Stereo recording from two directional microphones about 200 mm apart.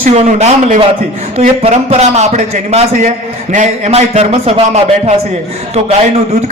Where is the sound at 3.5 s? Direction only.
35° right (ahead or behind).